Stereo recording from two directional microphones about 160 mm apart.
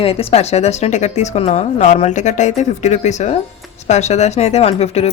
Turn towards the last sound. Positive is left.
turn(degrees=40)  # may be behind; listen again after turning